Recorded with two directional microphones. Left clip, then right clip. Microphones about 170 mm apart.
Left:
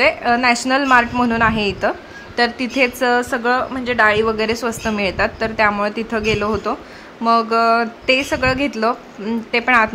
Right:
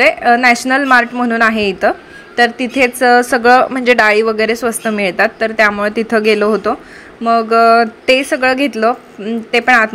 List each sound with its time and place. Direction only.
0.0 s a woman's voice: 15° right (ahead or behind)
5.9 s a woman's voice: 25° right (ahead or behind)